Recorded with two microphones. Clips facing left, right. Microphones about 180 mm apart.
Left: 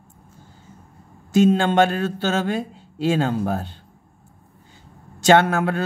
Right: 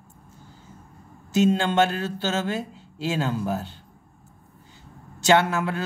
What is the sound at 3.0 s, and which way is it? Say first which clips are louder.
Speech: left 5 dB; 55° left (ahead or behind).